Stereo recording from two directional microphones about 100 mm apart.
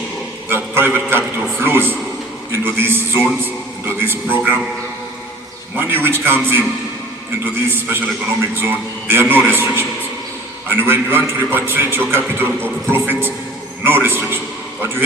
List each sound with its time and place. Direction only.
0.4 s a man's voice: 25° right (ahead or behind)
5.7 s a man's voice: 20° right (ahead or behind)
7.7 s a man's voice: 20° right (ahead or behind)